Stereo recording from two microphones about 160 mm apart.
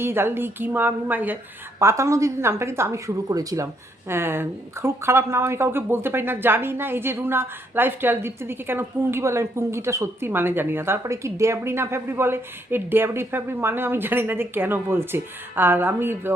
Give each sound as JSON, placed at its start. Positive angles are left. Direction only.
{"t": 0.0, "sound": "speech", "side_deg": -15}